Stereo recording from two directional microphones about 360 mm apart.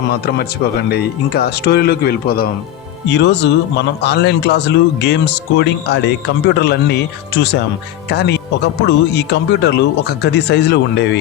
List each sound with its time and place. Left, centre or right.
0.1 s speech: left